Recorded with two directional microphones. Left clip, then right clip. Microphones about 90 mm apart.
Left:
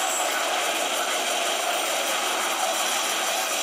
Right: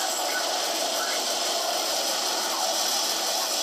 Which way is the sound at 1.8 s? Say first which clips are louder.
Left 2 dB; centre (ahead or behind).